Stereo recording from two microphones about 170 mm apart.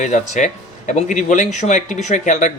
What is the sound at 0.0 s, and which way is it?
Speech, 45° left (ahead or behind).